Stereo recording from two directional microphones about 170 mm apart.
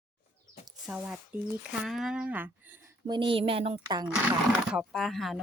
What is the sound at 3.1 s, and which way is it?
Speech, 30° right (ahead or behind).